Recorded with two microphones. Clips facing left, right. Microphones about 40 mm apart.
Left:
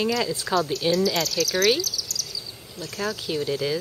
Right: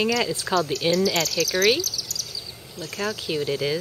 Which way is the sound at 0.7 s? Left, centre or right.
Centre.